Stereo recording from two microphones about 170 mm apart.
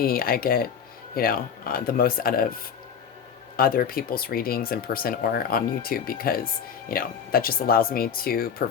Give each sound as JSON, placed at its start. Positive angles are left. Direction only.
{"t": 0.0, "sound": "speech", "side_deg": 60}